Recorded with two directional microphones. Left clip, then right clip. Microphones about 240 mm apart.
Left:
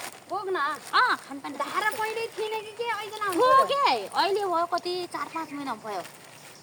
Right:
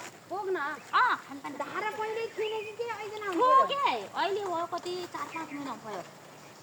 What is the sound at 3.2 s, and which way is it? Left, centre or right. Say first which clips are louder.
Speech: left 3 dB; left.